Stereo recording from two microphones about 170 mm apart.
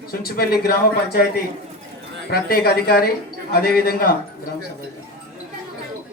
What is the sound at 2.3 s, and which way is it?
A man's voice, 65° left (ahead or behind).